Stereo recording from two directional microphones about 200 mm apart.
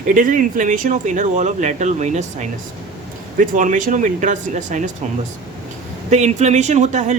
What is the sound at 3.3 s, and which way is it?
Speech, 40° right (ahead or behind).